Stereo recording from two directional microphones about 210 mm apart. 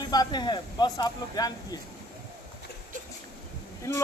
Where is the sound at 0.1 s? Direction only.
20° left (ahead or behind).